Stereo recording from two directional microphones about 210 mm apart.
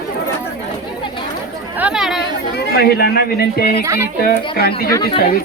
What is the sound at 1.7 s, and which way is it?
Chatter, 5° right (ahead or behind).